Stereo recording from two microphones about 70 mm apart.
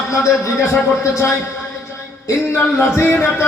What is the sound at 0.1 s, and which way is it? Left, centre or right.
A man's voice, left.